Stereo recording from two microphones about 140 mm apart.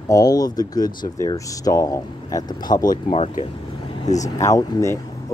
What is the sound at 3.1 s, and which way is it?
Speech, 45° left (ahead or behind).